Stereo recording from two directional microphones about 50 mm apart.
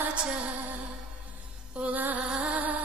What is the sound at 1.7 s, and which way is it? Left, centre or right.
Music, right.